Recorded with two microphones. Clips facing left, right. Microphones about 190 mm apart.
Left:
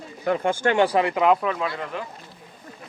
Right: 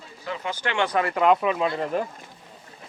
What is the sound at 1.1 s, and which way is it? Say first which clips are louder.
Speech: right 3 dB; 5° left (ahead or behind).